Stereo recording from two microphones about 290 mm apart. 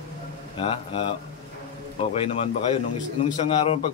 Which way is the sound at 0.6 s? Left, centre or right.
Centre.